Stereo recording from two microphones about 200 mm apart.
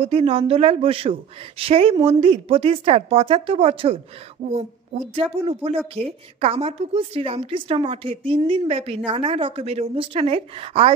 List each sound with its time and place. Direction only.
0.0 s a woman's voice: 30° right (ahead or behind)